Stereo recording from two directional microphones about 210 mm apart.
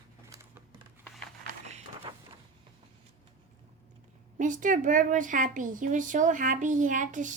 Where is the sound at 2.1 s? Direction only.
20° right (ahead or behind).